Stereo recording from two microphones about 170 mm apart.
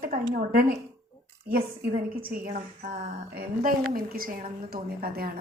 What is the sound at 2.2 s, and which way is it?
A woman's voice, 60° right (ahead or behind).